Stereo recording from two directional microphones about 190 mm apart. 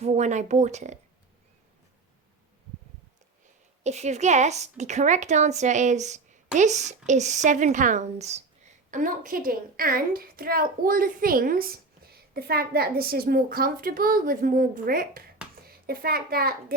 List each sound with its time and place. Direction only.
0.0 s speech: 35° right (ahead or behind)
3.8 s a woman's voice: 35° right (ahead or behind); by 16.7 s 55° right (ahead or behind)